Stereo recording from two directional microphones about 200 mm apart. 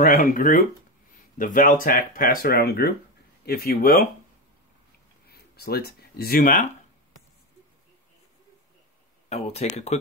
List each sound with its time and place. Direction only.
0.0 s speech: 40° left (ahead or behind)
5.3 s speech: 50° left (ahead or behind)
9.3 s speech: 35° left (ahead or behind)